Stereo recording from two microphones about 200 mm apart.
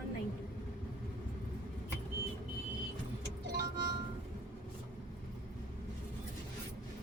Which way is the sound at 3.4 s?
60° right (ahead or behind).